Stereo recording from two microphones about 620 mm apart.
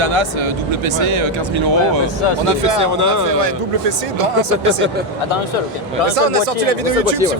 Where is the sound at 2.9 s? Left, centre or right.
Right.